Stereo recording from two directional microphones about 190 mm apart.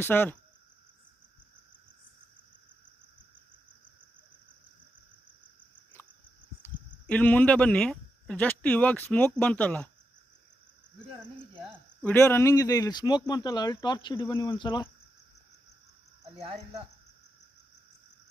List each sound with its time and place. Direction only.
0.0 s speech: 10° left (ahead or behind)
6.6 s speech: 10° left (ahead or behind)
12.0 s speech: 10° left (ahead or behind)